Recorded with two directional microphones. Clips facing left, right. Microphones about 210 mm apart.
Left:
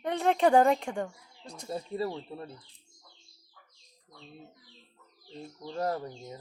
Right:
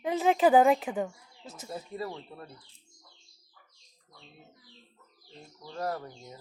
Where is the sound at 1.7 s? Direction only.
25° left (ahead or behind).